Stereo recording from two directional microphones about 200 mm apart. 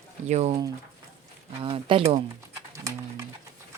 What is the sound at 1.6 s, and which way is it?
Speech, 25° right (ahead or behind).